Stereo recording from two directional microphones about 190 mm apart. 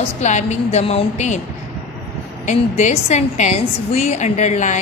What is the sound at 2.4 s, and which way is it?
A woman's voice, 35° left (ahead or behind).